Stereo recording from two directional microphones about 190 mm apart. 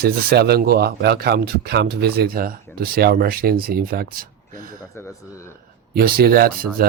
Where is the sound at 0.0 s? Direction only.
55° right (ahead or behind).